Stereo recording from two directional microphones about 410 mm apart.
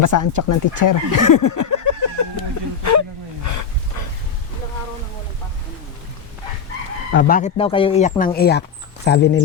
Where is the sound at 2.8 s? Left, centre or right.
Left.